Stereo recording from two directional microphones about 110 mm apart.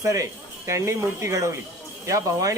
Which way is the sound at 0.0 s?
30° right (ahead or behind).